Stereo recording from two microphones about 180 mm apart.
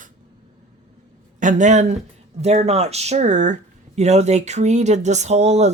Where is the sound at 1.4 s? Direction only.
45° right (ahead or behind).